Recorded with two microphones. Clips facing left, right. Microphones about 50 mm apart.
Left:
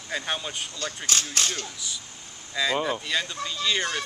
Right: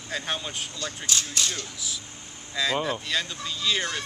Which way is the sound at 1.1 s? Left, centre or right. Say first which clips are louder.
Left 1 dB; left.